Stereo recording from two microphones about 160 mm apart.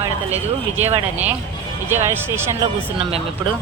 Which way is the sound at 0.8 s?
40° right (ahead or behind).